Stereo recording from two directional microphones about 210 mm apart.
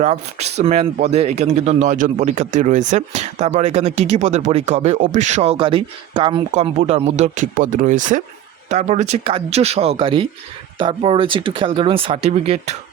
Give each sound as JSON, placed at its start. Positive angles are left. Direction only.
{"t": 0.0, "sound": "speech", "side_deg": -30}